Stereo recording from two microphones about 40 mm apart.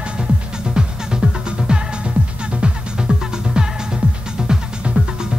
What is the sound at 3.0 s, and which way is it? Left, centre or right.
Music, right.